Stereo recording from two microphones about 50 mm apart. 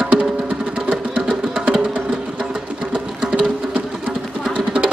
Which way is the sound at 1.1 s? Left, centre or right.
Centre.